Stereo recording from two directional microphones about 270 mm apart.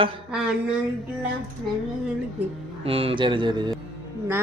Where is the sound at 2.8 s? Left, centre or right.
Right.